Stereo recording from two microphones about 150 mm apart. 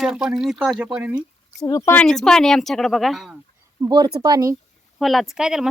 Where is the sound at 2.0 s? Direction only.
5° left (ahead or behind).